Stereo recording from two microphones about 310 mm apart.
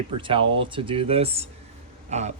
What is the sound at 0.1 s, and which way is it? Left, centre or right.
Speech, centre.